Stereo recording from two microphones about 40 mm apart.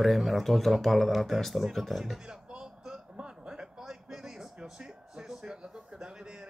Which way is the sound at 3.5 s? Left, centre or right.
Centre.